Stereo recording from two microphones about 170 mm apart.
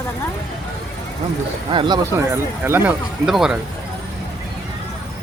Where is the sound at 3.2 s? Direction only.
5° right (ahead or behind).